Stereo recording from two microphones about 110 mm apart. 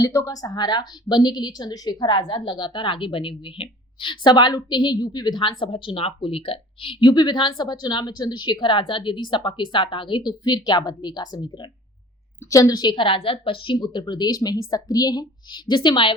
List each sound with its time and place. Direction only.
0.0 s a woman's voice: 30° left (ahead or behind); by 13.7 s 55° left (ahead or behind)
13.7 s a woman's voice: 40° left (ahead or behind)